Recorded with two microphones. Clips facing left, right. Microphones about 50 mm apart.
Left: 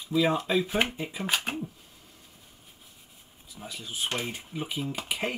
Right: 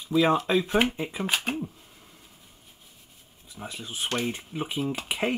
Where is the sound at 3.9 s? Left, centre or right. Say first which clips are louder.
Right 2 dB; right.